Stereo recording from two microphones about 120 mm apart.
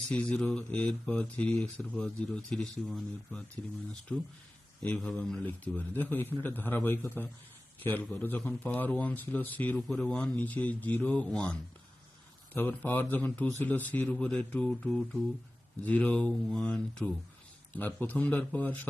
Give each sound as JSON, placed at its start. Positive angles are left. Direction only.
{"t": 0.1, "sound": "speech", "side_deg": 10}
{"t": 12.5, "sound": "speech", "side_deg": 15}